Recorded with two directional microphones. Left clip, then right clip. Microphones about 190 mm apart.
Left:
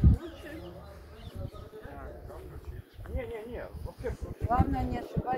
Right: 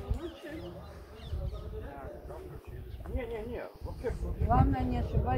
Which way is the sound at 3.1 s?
15° right (ahead or behind).